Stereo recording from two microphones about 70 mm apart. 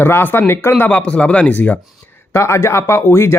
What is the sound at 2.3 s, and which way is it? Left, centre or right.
Speech, left.